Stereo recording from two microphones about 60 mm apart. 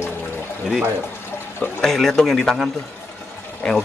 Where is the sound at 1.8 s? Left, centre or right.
Centre.